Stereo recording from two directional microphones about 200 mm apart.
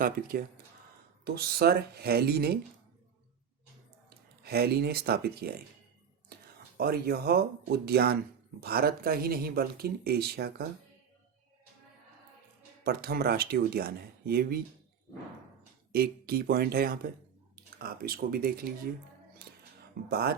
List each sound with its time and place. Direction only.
0.0 s speech: 50° right (ahead or behind)
4.4 s speech: 50° right (ahead or behind)
6.7 s speech: 50° right (ahead or behind)
12.8 s speech: 50° right (ahead or behind)
15.9 s speech: 50° right (ahead or behind)
19.4 s music: 50° right (ahead or behind)
20.1 s speech: 50° right (ahead or behind)